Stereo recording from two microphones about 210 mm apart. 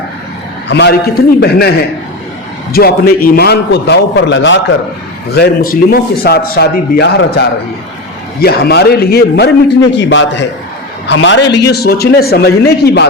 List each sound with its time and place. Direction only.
0.7 s a man's voice: 55° left (ahead or behind)
2.7 s a man's voice: 45° left (ahead or behind)
5.3 s a man's voice: 45° left (ahead or behind)